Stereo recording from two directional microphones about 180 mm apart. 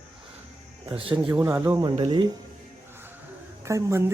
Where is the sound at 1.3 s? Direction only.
15° right (ahead or behind).